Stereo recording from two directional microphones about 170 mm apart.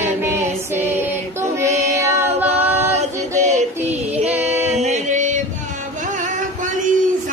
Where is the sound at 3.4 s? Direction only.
45° right (ahead or behind).